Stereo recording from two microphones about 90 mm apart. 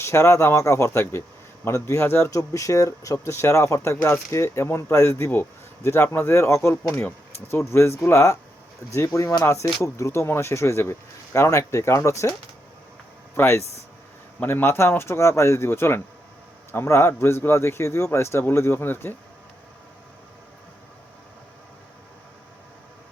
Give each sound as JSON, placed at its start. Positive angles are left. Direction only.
{"t": 0.0, "sound": "speech", "side_deg": 30}
{"t": 6.9, "sound": "speech", "side_deg": 20}
{"t": 7.4, "sound": "a man's voice", "side_deg": 30}
{"t": 13.3, "sound": "a man's voice", "side_deg": 30}